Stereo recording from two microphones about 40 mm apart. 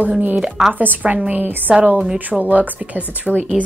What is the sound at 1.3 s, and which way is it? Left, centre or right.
Speech, right.